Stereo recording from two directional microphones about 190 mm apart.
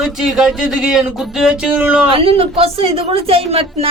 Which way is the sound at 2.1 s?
30° right (ahead or behind).